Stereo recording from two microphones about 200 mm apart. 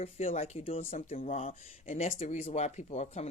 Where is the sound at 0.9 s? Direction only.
40° left (ahead or behind).